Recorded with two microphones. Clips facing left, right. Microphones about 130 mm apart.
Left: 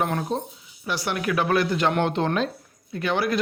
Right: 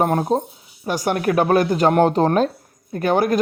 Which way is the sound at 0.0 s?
40° right (ahead or behind).